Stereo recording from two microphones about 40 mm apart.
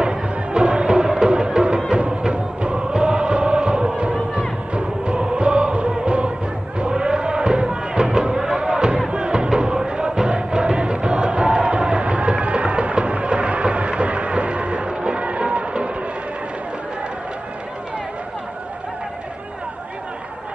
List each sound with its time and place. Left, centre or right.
0.0 s music: right
6.9 s a sound: right
9.1 s music: right